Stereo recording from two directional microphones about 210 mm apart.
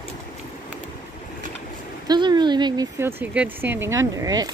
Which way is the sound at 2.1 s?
20° right (ahead or behind).